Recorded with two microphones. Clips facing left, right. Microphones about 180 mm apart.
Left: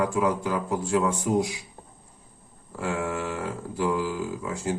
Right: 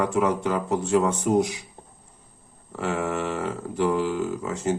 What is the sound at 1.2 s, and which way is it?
Speech, 75° right (ahead or behind).